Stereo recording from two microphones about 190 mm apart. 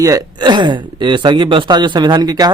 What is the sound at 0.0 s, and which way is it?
Speech, 20° right (ahead or behind).